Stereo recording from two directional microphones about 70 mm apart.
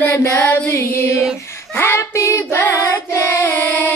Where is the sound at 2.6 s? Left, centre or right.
Left.